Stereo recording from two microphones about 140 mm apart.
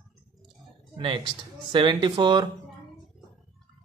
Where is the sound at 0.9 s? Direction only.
40° right (ahead or behind).